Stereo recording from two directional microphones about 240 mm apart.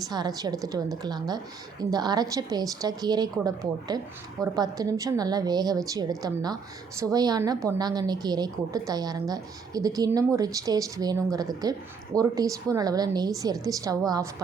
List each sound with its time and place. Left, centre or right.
0.1 s a woman's voice: centre